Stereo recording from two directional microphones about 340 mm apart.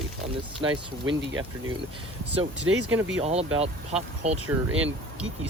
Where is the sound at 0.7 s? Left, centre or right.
Right.